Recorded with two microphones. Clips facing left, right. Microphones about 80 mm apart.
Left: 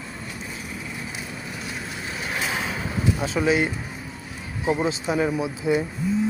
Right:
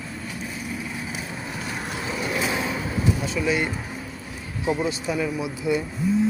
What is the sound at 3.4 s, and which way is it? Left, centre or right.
Speech, left.